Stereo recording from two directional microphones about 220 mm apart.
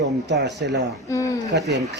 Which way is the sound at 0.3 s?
50° right (ahead or behind).